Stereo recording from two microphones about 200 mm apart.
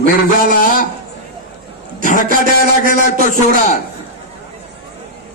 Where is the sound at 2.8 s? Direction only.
45° right (ahead or behind).